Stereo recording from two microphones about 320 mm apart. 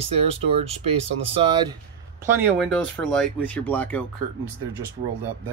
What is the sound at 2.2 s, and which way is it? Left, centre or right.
Speech, centre.